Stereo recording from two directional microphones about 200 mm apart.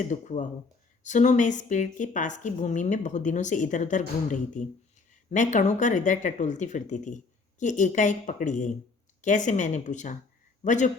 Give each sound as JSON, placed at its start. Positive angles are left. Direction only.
{"t": 0.0, "sound": "a woman's voice", "side_deg": 40}